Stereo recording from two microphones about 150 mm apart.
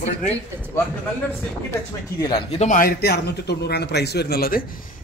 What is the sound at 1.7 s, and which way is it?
Speech, 25° left (ahead or behind).